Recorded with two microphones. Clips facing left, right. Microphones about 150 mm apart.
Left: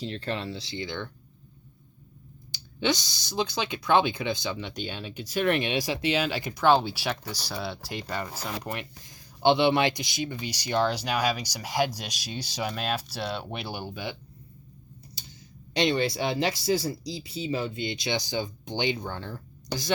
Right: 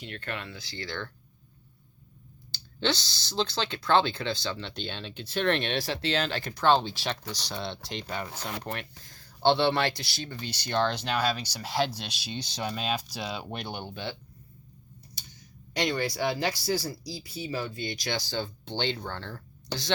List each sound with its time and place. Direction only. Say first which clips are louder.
0.0 s speech: left 6 dB; 30° left (ahead or behind)
2.5 s speech: left 2 dB; 15° left (ahead or behind)
15.7 s speech: left 4 dB; 25° left (ahead or behind)